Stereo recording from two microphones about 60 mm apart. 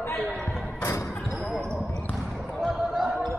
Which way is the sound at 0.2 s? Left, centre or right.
Centre.